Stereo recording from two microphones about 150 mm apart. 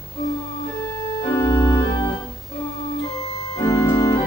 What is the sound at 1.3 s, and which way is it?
Organ, 25° left (ahead or behind).